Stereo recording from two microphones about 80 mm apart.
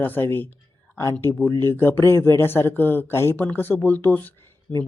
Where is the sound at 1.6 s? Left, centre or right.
Left.